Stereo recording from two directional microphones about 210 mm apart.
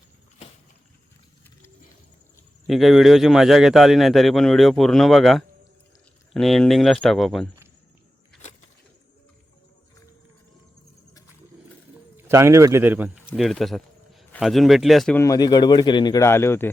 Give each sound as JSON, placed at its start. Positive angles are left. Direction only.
{"t": 2.6, "sound": "speech", "side_deg": 0}
{"t": 12.1, "sound": "speech", "side_deg": -15}
{"t": 15.2, "sound": "speech", "side_deg": 15}